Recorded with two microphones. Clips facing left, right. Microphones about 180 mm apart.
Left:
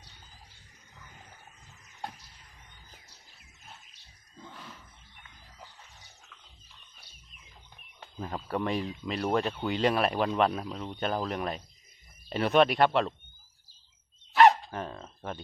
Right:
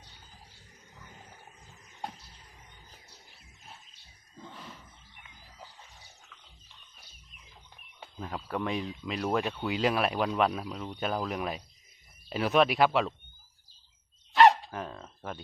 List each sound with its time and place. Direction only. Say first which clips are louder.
4.4 s a sound: right 1 dB; centre (ahead or behind)
8.2 s speech: left 2 dB; centre (ahead or behind)
14.3 s dog: even; centre (ahead or behind)